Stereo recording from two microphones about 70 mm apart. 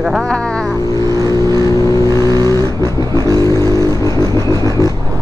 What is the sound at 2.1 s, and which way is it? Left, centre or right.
Vehicle, right.